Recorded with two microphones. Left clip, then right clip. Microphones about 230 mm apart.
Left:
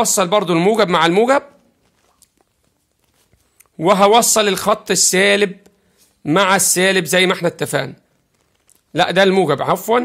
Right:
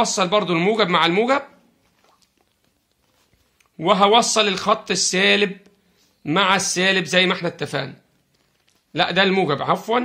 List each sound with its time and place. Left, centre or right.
0.0 s speech: left
3.5 s speech: left